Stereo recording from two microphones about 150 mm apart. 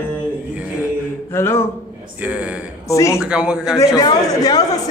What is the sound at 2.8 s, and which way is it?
Speech, 20° left (ahead or behind).